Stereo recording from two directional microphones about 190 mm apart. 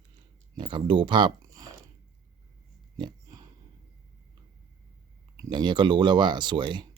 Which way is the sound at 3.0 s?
20° right (ahead or behind).